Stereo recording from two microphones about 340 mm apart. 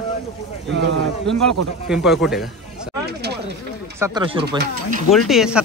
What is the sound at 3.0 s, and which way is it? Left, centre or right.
Speech, right.